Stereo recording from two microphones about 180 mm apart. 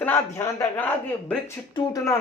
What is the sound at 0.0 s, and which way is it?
A man's voice, 15° left (ahead or behind).